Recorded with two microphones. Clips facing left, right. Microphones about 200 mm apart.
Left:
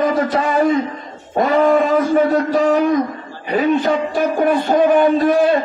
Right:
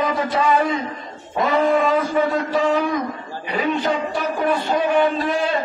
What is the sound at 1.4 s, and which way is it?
A man's voice, 45° left (ahead or behind).